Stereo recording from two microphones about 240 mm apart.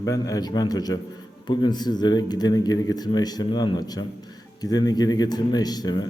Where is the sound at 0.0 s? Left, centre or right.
Centre.